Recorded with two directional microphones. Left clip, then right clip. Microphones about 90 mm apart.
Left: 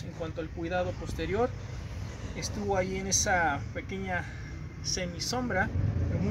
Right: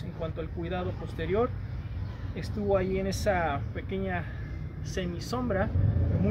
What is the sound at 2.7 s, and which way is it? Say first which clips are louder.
Speech: left 1 dB; 25° right (ahead or behind).